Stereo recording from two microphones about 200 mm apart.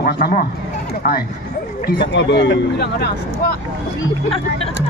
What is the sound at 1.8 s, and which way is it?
Speech, 60° left (ahead or behind).